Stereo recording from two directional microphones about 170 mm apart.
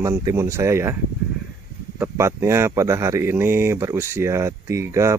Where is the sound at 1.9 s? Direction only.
15° right (ahead or behind).